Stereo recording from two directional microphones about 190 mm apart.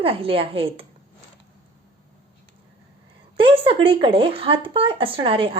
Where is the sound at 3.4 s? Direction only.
30° right (ahead or behind).